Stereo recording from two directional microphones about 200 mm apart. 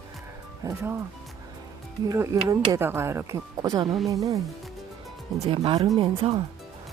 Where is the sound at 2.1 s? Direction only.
15° right (ahead or behind).